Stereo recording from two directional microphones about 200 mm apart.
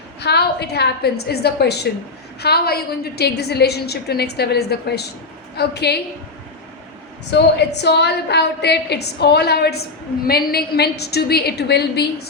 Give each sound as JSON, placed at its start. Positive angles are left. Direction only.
{"t": 0.2, "sound": "a woman's voice", "side_deg": 55}
{"t": 7.8, "sound": "a woman's voice", "side_deg": 55}